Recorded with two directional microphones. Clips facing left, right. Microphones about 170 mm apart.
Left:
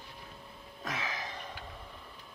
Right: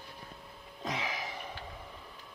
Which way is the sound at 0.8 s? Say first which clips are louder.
Right 2 dB; 15° right (ahead or behind).